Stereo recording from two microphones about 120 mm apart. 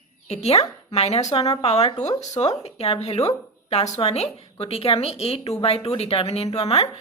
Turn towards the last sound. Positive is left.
turn(degrees=60)  # may be behind; listen again after turning